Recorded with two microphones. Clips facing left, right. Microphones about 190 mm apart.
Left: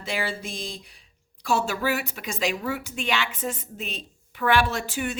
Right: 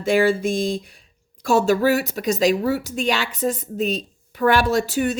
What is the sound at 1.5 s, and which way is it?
A woman's voice, 45° right (ahead or behind).